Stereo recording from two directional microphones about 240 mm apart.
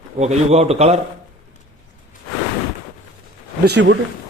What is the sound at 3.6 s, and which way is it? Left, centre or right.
Speech, right.